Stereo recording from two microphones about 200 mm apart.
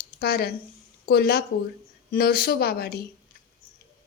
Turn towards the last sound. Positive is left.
turn(degrees=50)  # may be behind; listen again after turning